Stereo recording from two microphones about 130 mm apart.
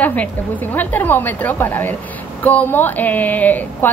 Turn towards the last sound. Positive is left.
turn(degrees=15)  # may be behind; listen again after turning